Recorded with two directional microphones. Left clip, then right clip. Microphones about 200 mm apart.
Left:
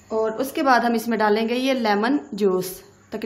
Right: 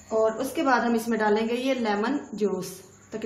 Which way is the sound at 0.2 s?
50° left (ahead or behind).